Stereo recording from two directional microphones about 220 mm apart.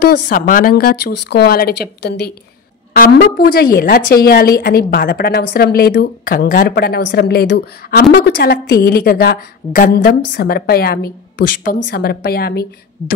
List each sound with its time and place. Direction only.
0.1 s a woman's voice: 40° left (ahead or behind)